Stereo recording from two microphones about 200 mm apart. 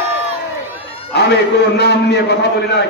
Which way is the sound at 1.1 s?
55° left (ahead or behind).